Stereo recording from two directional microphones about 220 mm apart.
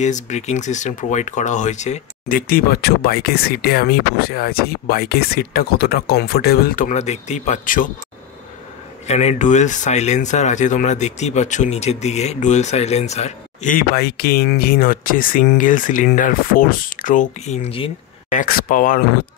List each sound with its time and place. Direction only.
0.0 s speech: 30° left (ahead or behind)
9.0 s speech: 30° left (ahead or behind)
18.4 s speech: 40° left (ahead or behind)